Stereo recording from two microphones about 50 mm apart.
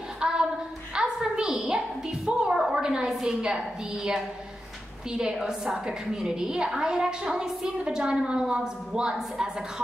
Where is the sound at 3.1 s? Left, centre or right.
Centre.